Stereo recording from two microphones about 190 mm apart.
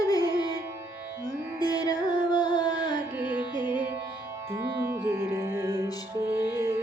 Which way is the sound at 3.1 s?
10° right (ahead or behind).